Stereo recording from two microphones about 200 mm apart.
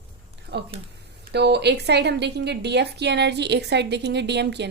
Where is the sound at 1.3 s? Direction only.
55° right (ahead or behind).